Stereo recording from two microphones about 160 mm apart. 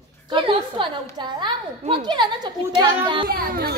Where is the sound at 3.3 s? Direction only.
70° right (ahead or behind).